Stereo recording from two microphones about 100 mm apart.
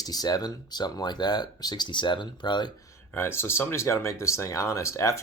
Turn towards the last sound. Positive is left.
turn(degrees=30)  # may be behind; listen again after turning